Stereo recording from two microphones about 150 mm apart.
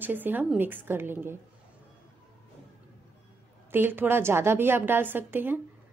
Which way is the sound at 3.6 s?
15° right (ahead or behind).